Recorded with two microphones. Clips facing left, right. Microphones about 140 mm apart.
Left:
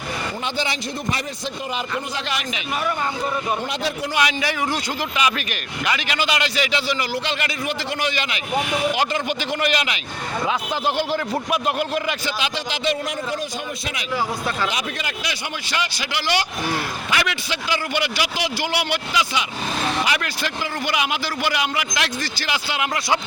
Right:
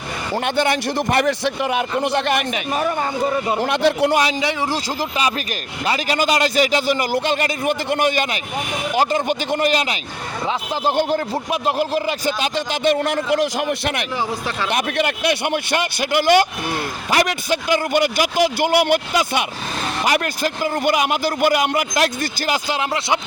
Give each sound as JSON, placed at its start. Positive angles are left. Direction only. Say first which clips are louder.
{"t": 0.4, "sound": "a man's voice", "louder": "right 9 dB", "side_deg": -55}
{"t": 3.6, "sound": "a man's voice", "louder": "right 9 dB", "side_deg": -65}
{"t": 4.2, "sound": "a man's voice", "louder": "right 2 dB", "side_deg": -30}
{"t": 11.5, "sound": "a man's voice", "louder": "right 4 dB", "side_deg": -30}
{"t": 14.7, "sound": "a man's voice", "louder": "right 7 dB", "side_deg": -55}